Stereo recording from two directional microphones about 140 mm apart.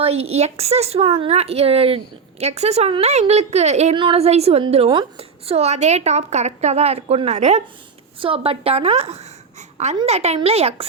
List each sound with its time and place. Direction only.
0.0 s a woman's voice: 45° right (ahead or behind)
3.9 s a woman's voice: 40° right (ahead or behind)
8.2 s a woman's voice: 40° right (ahead or behind)